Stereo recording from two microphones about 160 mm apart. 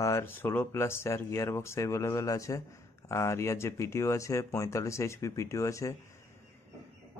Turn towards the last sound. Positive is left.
turn(degrees=20)  # may be behind; listen again after turning